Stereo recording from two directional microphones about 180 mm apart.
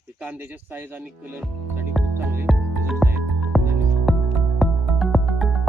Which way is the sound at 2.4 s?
Centre (ahead or behind).